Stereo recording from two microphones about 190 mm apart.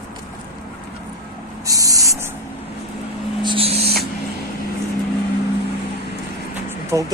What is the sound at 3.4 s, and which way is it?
Owl, 25° right (ahead or behind).